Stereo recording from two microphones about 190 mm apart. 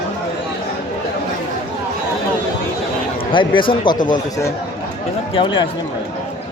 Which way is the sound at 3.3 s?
25° left (ahead or behind).